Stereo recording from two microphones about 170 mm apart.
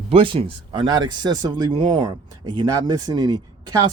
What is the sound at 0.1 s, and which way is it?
Speech, 30° right (ahead or behind).